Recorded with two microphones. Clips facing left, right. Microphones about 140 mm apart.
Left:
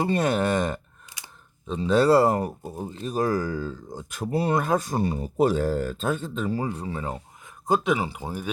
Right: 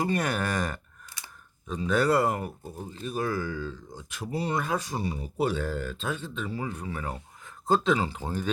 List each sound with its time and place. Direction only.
0.0 s speech: 25° left (ahead or behind)